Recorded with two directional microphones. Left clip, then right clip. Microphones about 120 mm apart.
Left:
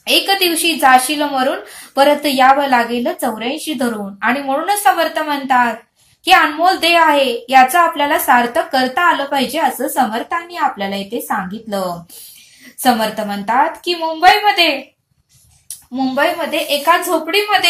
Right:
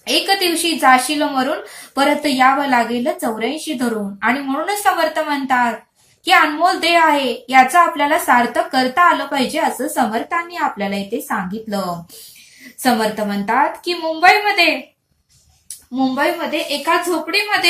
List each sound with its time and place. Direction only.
0.0 s a woman's voice: 5° left (ahead or behind)
12.8 s a woman's voice: 5° left (ahead or behind)
15.9 s a woman's voice: 15° left (ahead or behind)
16.3 s a woman's voice: 35° left (ahead or behind)